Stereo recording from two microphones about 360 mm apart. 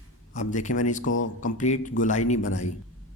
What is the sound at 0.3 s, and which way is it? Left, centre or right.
A man's voice, left.